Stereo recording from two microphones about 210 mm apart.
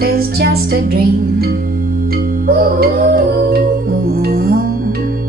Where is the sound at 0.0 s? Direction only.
45° right (ahead or behind).